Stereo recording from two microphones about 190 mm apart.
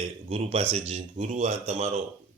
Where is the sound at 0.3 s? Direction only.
30° right (ahead or behind).